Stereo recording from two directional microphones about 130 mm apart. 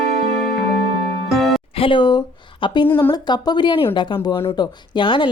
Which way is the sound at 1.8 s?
45° left (ahead or behind).